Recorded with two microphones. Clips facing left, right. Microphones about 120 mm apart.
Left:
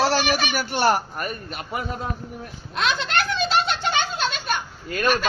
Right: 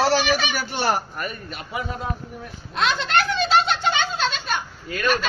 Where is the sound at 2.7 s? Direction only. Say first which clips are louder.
Right 1 dB; 55° left (ahead or behind).